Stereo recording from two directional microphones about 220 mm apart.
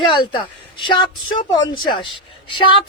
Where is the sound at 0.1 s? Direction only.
20° left (ahead or behind).